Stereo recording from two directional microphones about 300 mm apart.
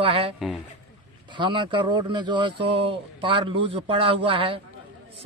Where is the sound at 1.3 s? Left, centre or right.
Centre.